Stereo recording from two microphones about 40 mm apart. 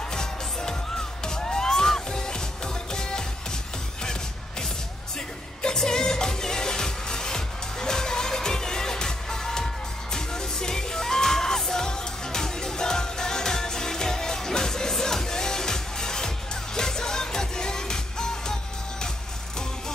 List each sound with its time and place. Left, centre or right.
0.0 s music: centre